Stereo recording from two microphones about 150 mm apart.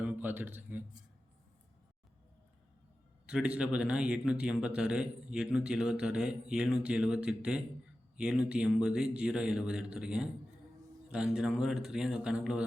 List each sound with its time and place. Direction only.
0.0 s a man's voice: 10° right (ahead or behind)
3.2 s a man's voice: 5° right (ahead or behind)